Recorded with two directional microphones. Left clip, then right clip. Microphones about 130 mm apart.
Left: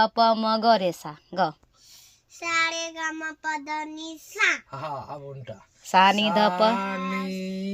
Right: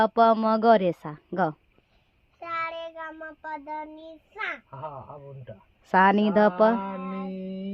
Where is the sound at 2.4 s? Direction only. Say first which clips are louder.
Left 6 dB; centre (ahead or behind).